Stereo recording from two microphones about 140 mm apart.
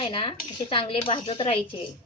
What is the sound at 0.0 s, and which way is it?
Speech, 40° left (ahead or behind).